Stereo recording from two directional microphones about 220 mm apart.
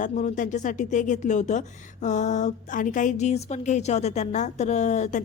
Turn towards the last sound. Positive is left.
turn(degrees=30)  # may be behind; listen again after turning